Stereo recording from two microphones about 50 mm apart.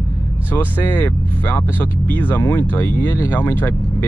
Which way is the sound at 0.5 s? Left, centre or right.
Left.